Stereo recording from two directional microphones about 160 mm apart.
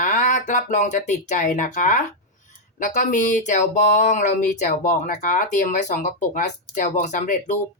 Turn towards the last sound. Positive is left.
turn(degrees=50)  # may be behind; listen again after turning